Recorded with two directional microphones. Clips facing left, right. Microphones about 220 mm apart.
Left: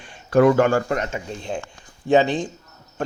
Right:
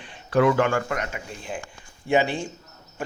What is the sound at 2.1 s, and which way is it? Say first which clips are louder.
Speech: left 5 dB; 10° right (ahead or behind).